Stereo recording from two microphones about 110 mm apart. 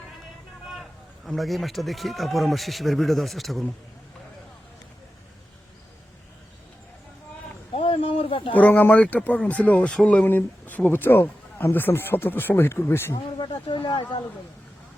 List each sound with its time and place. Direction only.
0.6 s a man's voice: centre (ahead or behind)
7.7 s a sound: 65° left (ahead or behind)
8.5 s speech: 15° left (ahead or behind)
13.4 s speech: 45° left (ahead or behind)